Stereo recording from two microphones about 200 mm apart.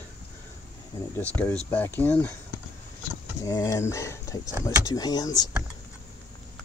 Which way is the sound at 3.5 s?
15° left (ahead or behind).